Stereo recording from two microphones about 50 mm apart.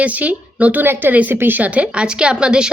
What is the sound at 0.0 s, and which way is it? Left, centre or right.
Speech, right.